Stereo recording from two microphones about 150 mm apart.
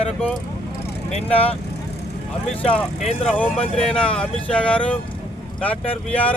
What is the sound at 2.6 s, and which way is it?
Speech, 5° left (ahead or behind).